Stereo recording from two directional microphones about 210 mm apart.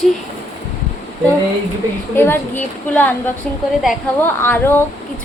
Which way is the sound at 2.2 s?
10° left (ahead or behind).